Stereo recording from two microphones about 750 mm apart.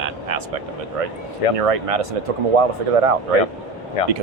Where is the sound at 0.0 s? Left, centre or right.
Right.